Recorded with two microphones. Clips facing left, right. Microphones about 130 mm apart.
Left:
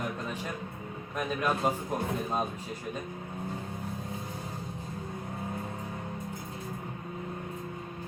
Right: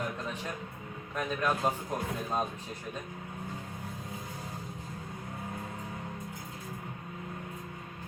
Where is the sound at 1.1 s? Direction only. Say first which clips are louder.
Left 1 dB; 10° left (ahead or behind).